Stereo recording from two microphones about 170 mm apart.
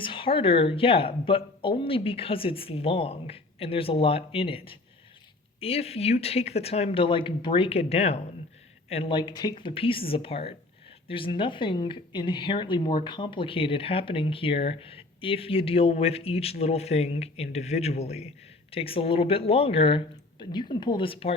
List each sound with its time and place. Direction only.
0.0 s speech: 30° left (ahead or behind)